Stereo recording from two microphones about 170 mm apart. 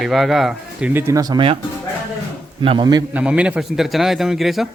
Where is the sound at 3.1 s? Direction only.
5° right (ahead or behind).